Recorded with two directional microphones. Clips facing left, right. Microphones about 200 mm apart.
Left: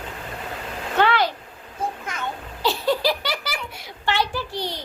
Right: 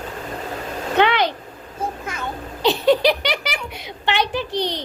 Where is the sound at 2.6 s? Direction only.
20° right (ahead or behind).